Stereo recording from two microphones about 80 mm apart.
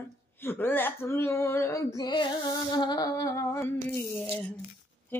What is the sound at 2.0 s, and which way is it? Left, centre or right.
Music, left.